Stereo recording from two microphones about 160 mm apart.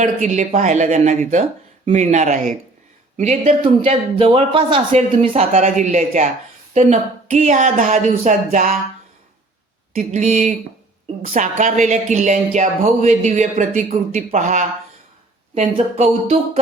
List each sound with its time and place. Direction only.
0.0 s speech: 45° right (ahead or behind)
9.9 s speech: 50° right (ahead or behind)